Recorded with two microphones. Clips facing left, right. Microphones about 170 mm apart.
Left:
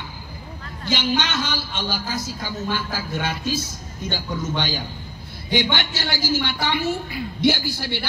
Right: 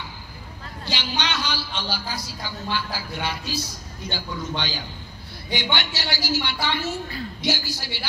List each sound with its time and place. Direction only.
0.8 s a man's voice: 50° left (ahead or behind)